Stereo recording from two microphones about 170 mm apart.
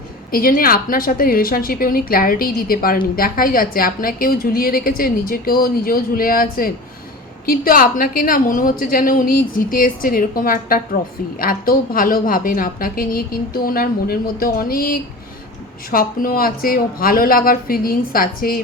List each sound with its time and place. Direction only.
0.3 s a woman's voice: 60° left (ahead or behind)